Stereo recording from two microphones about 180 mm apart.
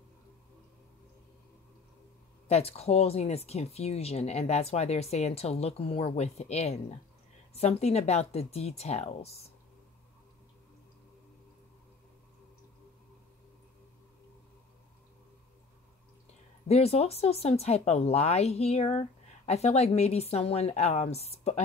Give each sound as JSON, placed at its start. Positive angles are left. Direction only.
{"t": 2.4, "sound": "speech", "side_deg": 35}
{"t": 16.6, "sound": "speech", "side_deg": 35}